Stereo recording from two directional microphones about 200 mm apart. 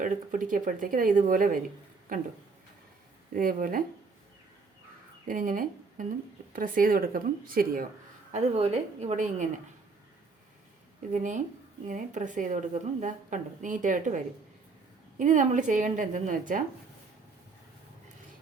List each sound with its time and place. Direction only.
0.0 s speech: 40° right (ahead or behind)
3.3 s speech: 45° right (ahead or behind)
5.3 s speech: 40° right (ahead or behind)
8.3 s a woman's voice: 35° right (ahead or behind)
11.1 s a woman's voice: 40° right (ahead or behind)
15.2 s a woman's voice: 40° right (ahead or behind)